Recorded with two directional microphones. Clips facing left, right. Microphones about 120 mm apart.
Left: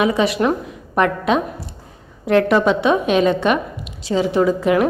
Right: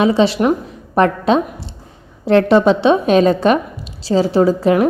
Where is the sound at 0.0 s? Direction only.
30° right (ahead or behind).